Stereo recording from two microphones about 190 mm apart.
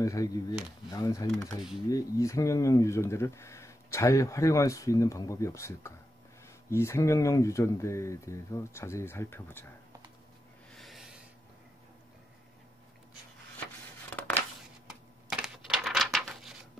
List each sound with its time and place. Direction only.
0.0 s speech: 15° left (ahead or behind)
10.8 s a sound: centre (ahead or behind)
14.9 s typewriter: centre (ahead or behind)